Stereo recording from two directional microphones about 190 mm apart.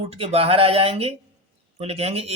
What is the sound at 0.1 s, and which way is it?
Speech, 30° right (ahead or behind).